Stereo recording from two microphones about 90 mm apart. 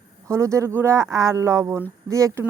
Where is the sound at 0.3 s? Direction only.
35° right (ahead or behind).